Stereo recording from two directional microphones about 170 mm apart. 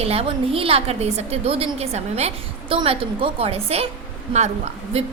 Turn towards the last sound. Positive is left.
turn(degrees=-40)  # may be behind; listen again after turning